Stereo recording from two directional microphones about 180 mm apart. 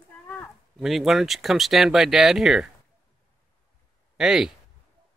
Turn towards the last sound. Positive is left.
turn(degrees=-5)  # may be behind; listen again after turning